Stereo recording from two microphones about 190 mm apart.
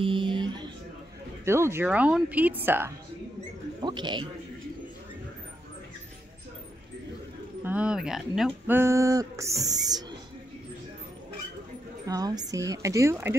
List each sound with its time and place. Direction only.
0.0 s music: 25° right (ahead or behind)
1.4 s speech: 15° right (ahead or behind)
3.8 s speech: 25° right (ahead or behind)
7.6 s speech: 5° right (ahead or behind)
12.1 s speech: 20° right (ahead or behind)